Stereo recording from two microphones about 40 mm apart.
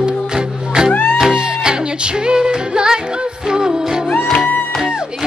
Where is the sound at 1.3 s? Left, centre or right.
Right.